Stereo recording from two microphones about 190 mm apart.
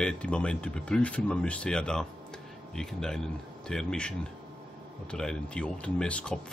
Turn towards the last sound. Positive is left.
turn(degrees=5)  # may be behind; listen again after turning